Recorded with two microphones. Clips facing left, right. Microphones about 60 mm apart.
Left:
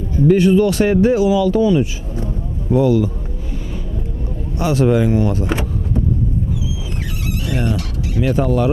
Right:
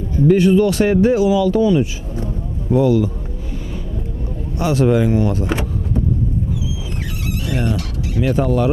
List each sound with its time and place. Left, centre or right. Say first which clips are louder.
0.3 s speech: even; centre
4.6 s speech: even; centre
7.2 s speech: even; centre